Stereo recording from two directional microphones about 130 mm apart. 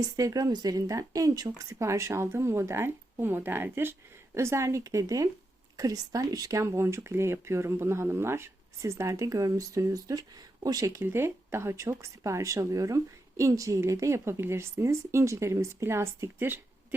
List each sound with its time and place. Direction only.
0.0 s speech: 25° right (ahead or behind)